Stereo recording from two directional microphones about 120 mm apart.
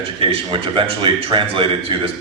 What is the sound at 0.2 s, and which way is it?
Speech, 50° right (ahead or behind).